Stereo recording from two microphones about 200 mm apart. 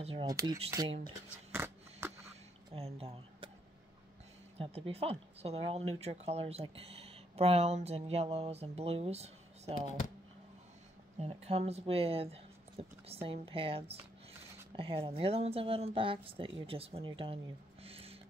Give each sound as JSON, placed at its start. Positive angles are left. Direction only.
{"t": 0.0, "sound": "speech", "side_deg": -25}
{"t": 1.5, "sound": "a sound", "side_deg": -10}
{"t": 2.7, "sound": "speech", "side_deg": -30}
{"t": 4.6, "sound": "speech", "side_deg": -30}
{"t": 11.1, "sound": "speech", "side_deg": -30}
{"t": 17.8, "sound": "a sound", "side_deg": -30}